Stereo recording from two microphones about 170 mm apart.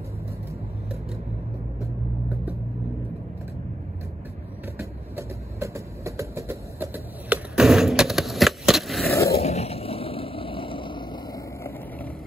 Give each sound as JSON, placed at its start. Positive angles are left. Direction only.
{"t": 5.1, "sound": "vehicle", "side_deg": -15}
{"t": 9.4, "sound": "vehicle", "side_deg": 40}